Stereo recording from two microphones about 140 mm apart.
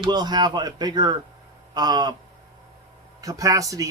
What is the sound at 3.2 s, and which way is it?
Speech, 25° right (ahead or behind).